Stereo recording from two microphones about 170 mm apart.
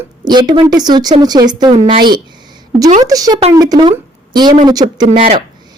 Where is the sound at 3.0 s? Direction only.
20° right (ahead or behind).